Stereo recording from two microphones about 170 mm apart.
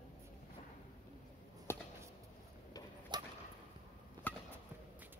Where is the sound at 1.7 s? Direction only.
15° left (ahead or behind).